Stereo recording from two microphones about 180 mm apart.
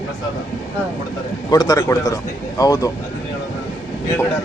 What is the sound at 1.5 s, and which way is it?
A man's voice, 20° left (ahead or behind).